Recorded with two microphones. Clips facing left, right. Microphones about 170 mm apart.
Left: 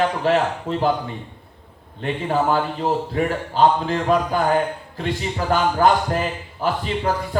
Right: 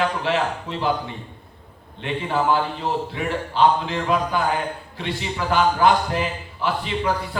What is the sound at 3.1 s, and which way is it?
A man's voice, 45° left (ahead or behind).